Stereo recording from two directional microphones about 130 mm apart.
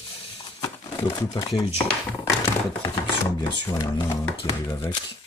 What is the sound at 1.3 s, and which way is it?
Speech, 35° left (ahead or behind).